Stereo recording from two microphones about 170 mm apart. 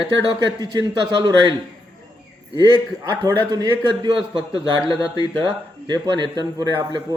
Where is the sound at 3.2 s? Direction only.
25° right (ahead or behind).